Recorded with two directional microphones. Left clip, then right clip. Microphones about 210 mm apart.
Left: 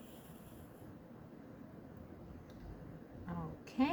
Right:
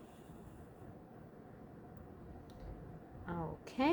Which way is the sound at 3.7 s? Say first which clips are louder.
Right 2 dB; 50° right (ahead or behind).